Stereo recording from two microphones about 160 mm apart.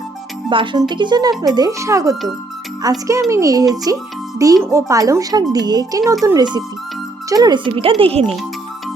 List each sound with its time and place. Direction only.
0.5 s speech: 30° right (ahead or behind)